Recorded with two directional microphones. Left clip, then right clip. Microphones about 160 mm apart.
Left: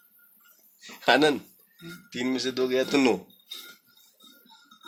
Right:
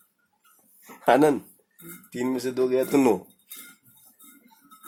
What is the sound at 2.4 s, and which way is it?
Speech, 20° right (ahead or behind).